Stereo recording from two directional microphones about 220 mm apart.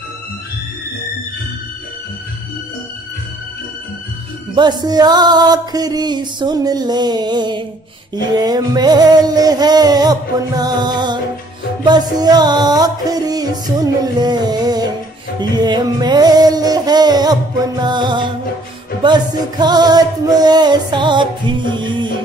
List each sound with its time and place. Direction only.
4.6 s music: 20° right (ahead or behind)